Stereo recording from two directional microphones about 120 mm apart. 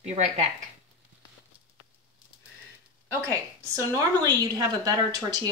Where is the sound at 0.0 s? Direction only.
65° right (ahead or behind).